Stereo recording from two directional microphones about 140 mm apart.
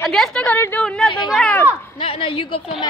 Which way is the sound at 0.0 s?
5° left (ahead or behind).